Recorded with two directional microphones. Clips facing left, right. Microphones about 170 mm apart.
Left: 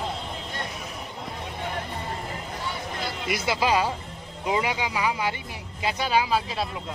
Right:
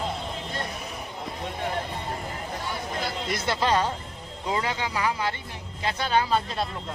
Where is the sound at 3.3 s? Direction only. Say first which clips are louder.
Left 1 dB; 10° left (ahead or behind).